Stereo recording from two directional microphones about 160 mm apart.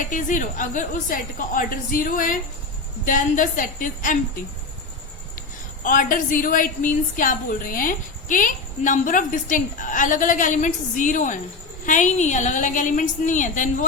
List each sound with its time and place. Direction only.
0.1 s a woman's voice: 55° left (ahead or behind)
5.8 s a woman's voice: 55° left (ahead or behind)